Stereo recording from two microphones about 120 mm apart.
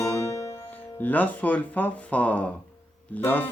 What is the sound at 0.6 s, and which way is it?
Speech, 15° left (ahead or behind).